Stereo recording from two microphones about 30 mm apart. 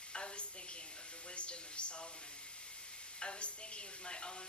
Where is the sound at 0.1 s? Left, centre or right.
Left.